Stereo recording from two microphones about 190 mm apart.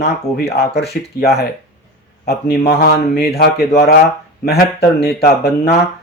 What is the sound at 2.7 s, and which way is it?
Speech, 55° left (ahead or behind).